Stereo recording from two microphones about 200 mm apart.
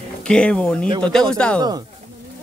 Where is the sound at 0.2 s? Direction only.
5° left (ahead or behind).